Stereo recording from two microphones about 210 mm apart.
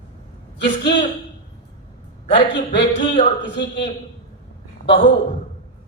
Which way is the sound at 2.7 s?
25° left (ahead or behind).